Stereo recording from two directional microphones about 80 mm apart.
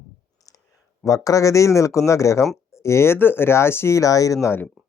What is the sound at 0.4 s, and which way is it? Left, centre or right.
Clicking, left.